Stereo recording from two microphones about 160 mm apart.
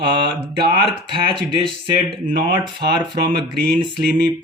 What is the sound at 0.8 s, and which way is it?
Speech, 35° right (ahead or behind).